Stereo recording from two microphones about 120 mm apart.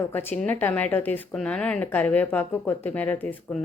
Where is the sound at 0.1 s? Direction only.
15° left (ahead or behind).